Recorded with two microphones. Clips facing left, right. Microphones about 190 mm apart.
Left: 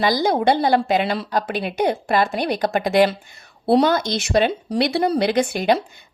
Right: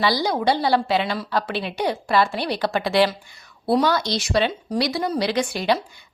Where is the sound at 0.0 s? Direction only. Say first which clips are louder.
Left 3 dB; 45° left (ahead or behind).